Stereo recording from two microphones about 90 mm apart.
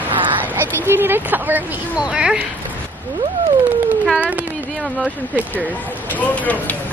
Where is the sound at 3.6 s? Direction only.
20° right (ahead or behind).